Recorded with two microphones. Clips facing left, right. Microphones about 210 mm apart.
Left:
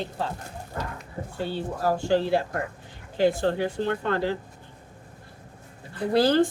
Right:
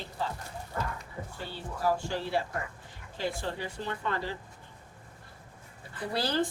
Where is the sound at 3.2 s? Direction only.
60° left (ahead or behind).